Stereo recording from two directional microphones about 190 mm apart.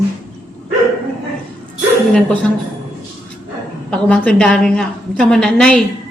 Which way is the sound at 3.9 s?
5° left (ahead or behind).